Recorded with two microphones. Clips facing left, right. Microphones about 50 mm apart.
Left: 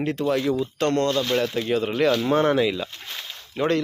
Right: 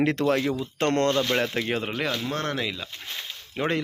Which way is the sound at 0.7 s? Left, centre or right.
Right.